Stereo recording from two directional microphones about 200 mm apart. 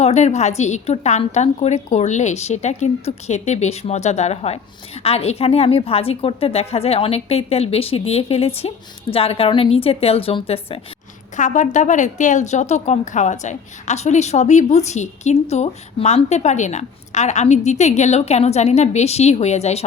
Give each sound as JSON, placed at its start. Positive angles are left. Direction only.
{"t": 0.0, "sound": "a woman's voice", "side_deg": 35}